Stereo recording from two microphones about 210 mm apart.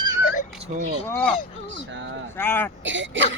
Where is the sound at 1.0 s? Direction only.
5° left (ahead or behind).